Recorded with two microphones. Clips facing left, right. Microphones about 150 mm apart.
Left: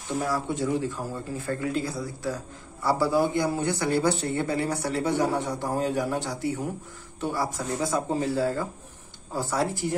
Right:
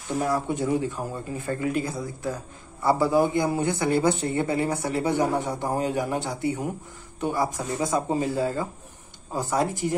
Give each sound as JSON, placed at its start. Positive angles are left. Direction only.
{"t": 0.2, "sound": "a man's voice", "side_deg": -20}